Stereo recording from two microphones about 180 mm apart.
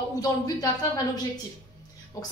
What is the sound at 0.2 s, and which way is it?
A woman's voice, 20° left (ahead or behind).